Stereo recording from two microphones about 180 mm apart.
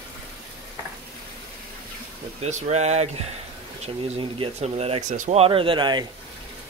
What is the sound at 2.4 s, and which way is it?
Speech, 40° right (ahead or behind).